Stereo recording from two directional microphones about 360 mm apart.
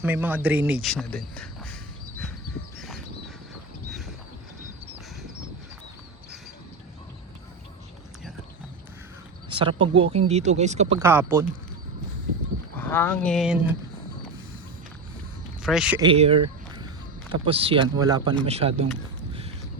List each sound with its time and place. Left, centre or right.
0.0 s speech: centre
9.5 s speech: centre
12.7 s speech: centre
15.6 s speech: centre
17.4 s speech: centre